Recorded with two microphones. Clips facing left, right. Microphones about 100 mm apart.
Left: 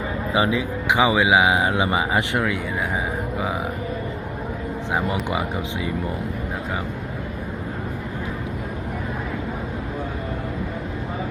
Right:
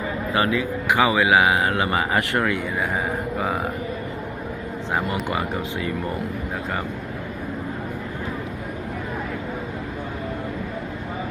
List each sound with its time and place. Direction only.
0.3 s speech: 15° left (ahead or behind)
2.4 s speech: 5° left (ahead or behind)
5.3 s speech: 15° left (ahead or behind)